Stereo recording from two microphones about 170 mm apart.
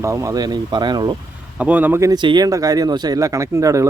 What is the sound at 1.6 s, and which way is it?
Speech, 10° right (ahead or behind).